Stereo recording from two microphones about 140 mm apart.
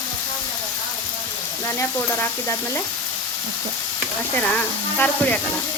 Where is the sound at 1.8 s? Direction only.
15° left (ahead or behind).